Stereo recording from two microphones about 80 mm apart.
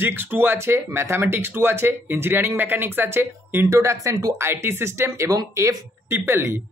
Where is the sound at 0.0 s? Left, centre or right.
Right.